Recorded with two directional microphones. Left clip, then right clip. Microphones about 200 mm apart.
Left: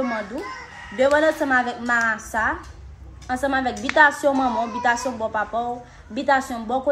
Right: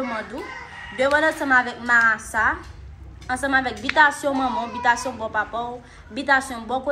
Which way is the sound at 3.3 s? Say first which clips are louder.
Right 1 dB; 35° left (ahead or behind).